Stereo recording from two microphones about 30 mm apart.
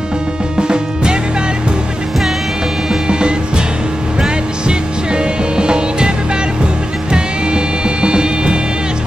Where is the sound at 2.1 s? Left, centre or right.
Centre.